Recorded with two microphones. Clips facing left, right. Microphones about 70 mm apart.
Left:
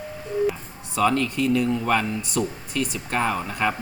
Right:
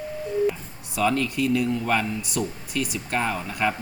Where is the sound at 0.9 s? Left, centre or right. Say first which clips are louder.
Left 2 dB; centre.